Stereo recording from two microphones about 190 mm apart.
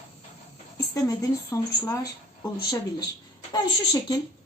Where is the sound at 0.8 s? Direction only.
20° left (ahead or behind).